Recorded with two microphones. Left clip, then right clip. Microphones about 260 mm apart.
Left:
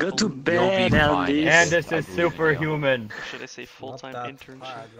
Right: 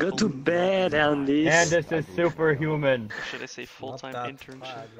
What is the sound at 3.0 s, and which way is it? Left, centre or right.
Speech, centre.